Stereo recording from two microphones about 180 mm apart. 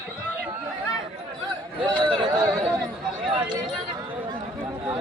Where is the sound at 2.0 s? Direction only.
25° right (ahead or behind).